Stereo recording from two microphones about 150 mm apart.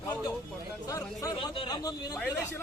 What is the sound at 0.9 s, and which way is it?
Chatter, 25° left (ahead or behind).